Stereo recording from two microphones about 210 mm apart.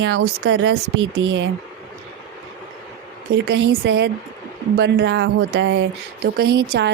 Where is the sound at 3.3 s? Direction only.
55° right (ahead or behind).